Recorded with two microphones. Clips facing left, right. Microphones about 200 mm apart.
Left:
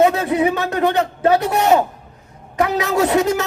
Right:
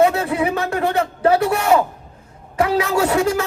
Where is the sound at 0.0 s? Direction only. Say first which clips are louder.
Left 1 dB; 20° left (ahead or behind).